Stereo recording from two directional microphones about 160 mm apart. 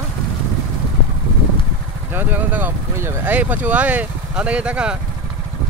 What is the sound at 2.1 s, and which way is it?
Speech, 10° right (ahead or behind).